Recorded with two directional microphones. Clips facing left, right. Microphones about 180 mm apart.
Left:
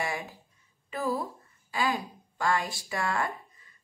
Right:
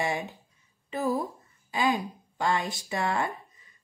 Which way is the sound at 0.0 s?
25° right (ahead or behind).